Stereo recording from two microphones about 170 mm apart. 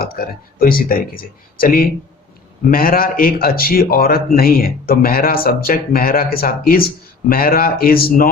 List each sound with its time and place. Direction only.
0.0 s speech: 60° left (ahead or behind)